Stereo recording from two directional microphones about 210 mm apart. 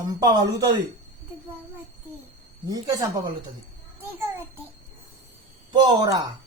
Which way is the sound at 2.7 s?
15° right (ahead or behind).